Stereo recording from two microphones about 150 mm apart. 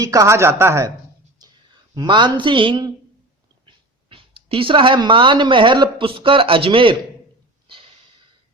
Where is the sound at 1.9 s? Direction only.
30° right (ahead or behind).